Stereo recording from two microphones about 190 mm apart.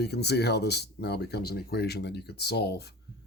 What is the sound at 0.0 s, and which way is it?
Speech, 60° left (ahead or behind).